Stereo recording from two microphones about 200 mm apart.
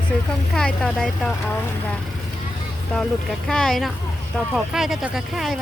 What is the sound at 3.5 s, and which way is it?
Speech, centre (ahead or behind).